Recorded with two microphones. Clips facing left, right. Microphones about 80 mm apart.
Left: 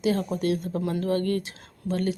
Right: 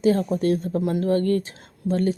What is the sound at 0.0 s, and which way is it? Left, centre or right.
Speech, right.